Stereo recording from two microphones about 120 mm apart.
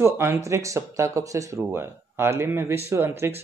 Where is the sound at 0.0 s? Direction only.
20° right (ahead or behind).